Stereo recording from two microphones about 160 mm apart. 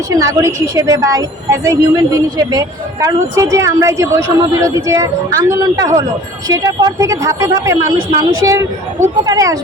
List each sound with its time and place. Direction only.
0.2 s a woman's voice: 20° right (ahead or behind)